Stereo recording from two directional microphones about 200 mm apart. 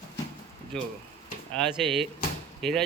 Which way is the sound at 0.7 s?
5° left (ahead or behind).